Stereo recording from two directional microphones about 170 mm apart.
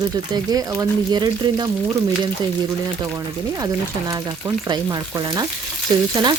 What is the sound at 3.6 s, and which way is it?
Speech, 20° right (ahead or behind).